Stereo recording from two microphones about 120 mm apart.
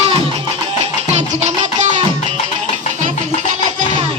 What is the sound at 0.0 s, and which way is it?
Music, 60° right (ahead or behind).